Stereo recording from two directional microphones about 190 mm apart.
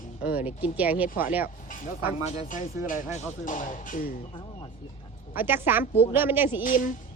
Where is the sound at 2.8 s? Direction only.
45° left (ahead or behind).